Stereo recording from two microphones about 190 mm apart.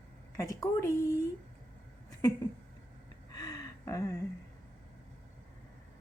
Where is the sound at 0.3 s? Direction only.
15° left (ahead or behind).